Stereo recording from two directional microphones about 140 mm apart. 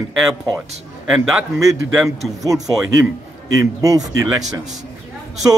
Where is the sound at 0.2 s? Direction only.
Centre (ahead or behind).